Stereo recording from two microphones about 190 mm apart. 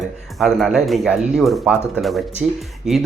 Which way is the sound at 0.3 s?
Centre (ahead or behind).